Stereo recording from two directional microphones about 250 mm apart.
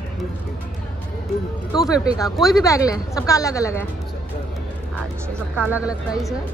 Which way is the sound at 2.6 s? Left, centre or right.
Centre.